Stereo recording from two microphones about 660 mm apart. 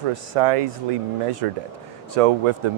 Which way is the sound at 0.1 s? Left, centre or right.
Right.